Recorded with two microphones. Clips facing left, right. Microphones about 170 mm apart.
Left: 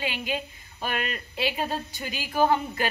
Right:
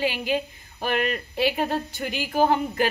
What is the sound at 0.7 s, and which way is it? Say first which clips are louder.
A woman's voice: right 6 dB; 50° right (ahead or behind).